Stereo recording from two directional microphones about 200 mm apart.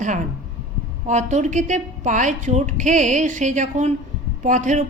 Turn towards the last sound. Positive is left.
turn(degrees=-35)  # may be behind; listen again after turning